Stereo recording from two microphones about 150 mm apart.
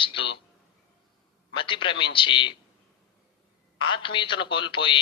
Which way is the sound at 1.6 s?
35° left (ahead or behind).